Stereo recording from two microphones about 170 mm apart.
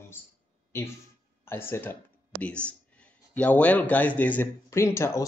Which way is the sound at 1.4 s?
15° left (ahead or behind).